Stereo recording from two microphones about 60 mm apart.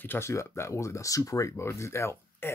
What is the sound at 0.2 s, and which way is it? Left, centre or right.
Speech, left.